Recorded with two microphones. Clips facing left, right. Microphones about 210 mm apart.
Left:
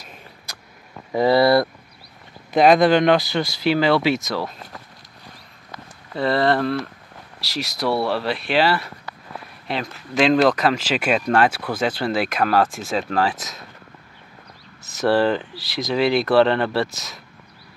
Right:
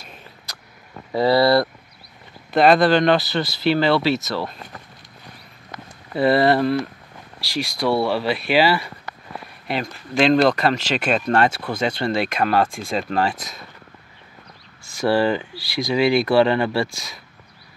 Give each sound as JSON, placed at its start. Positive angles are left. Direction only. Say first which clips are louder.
{"t": 1.1, "sound": "speech", "louder": "even", "side_deg": 15}
{"t": 6.1, "sound": "speech", "louder": "right 3 dB", "side_deg": -10}
{"t": 14.8, "sound": "speech", "louder": "left 1 dB", "side_deg": -5}